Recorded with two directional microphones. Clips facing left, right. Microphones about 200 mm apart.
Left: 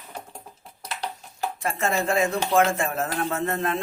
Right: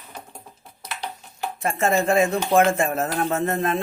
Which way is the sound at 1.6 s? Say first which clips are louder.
Right 5 dB; 25° right (ahead or behind).